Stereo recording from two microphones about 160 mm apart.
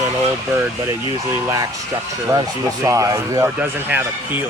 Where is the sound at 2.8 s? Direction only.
20° right (ahead or behind).